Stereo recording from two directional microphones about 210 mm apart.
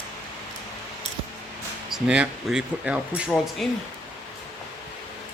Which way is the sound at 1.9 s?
5° right (ahead or behind).